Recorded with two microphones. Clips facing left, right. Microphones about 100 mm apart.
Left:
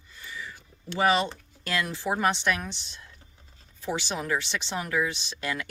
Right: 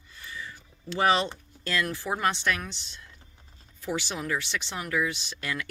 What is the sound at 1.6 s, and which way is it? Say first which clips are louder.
Speech: even; 15° left (ahead or behind).